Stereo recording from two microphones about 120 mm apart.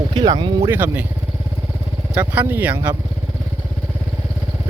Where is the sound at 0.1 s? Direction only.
40° right (ahead or behind).